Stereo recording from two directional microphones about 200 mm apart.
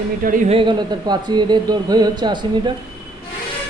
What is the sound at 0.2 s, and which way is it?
Speech, 40° right (ahead or behind).